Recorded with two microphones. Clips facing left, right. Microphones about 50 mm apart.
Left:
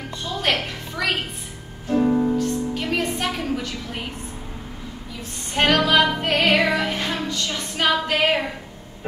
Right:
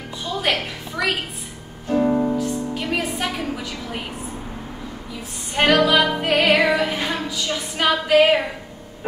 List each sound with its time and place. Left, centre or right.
0.2 s music: centre
5.5 s music: centre